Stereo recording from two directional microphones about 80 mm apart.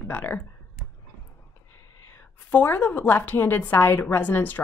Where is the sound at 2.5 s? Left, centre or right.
Left.